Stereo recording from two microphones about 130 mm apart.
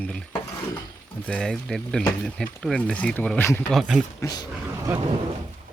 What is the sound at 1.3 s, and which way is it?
Speech, 5° left (ahead or behind).